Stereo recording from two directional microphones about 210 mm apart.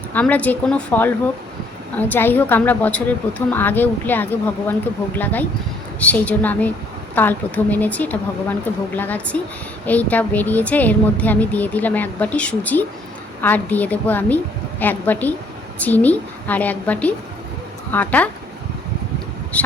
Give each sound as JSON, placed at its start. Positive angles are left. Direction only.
{"t": 0.1, "sound": "a woman's voice", "side_deg": 5}
{"t": 19.5, "sound": "a woman's voice", "side_deg": 5}